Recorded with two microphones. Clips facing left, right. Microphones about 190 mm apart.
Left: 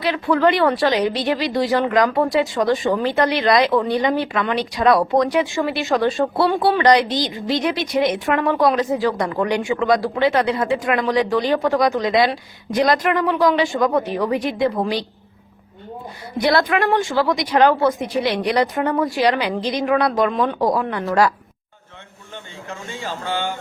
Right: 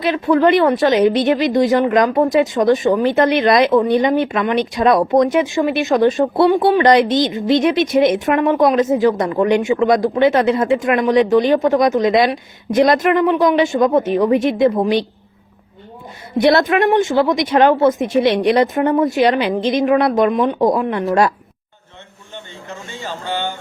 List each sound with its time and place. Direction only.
0.0 s speech: 20° right (ahead or behind)
16.4 s speech: 25° right (ahead or behind)